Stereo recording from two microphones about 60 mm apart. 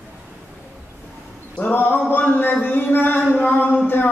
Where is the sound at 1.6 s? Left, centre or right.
Left.